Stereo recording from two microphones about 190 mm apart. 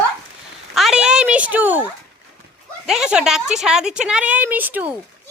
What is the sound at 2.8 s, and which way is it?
Speech, 5° right (ahead or behind).